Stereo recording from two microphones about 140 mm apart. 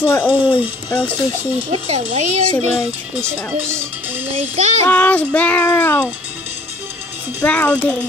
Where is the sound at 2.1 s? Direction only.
55° right (ahead or behind).